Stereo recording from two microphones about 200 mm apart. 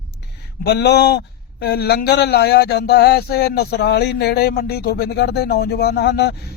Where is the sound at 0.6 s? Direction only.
55° left (ahead or behind).